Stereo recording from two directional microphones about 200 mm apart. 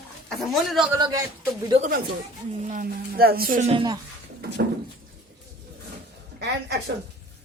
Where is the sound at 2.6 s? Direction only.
45° right (ahead or behind).